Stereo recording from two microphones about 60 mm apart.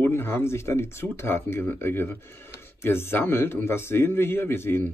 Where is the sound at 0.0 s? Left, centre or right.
Left.